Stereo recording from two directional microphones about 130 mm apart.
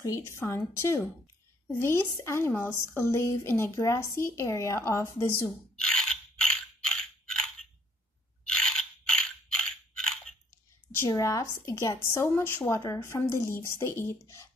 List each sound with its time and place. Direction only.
0.0 s a woman's voice: 20° left (ahead or behind)
5.8 s mechanisms: 5° left (ahead or behind)
11.1 s a woman's voice: 25° left (ahead or behind)